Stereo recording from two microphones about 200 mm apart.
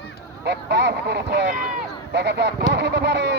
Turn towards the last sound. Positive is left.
turn(degrees=-60)  # may be behind; listen again after turning